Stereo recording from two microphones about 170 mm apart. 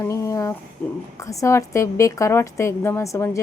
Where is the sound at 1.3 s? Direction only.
20° left (ahead or behind).